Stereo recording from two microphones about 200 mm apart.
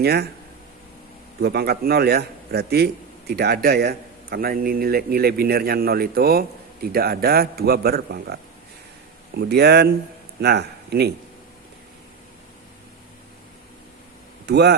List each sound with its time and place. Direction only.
0.0 s a man's voice: 55° right (ahead or behind)
1.4 s a man's voice: 55° right (ahead or behind)
14.4 s speech: 55° right (ahead or behind)